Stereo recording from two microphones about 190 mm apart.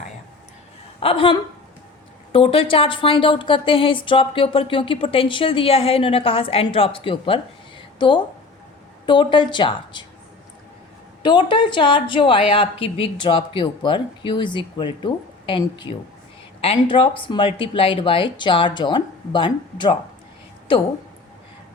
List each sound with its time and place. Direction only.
0.9 s a woman's voice: 30° left (ahead or behind)
7.8 s a sound: 25° left (ahead or behind)
9.0 s a woman's voice: 25° left (ahead or behind)
11.2 s a woman's voice: 25° left (ahead or behind)